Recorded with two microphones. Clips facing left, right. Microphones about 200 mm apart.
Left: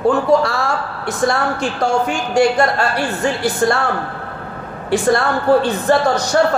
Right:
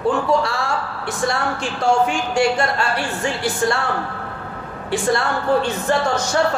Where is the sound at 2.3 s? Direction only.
40° left (ahead or behind).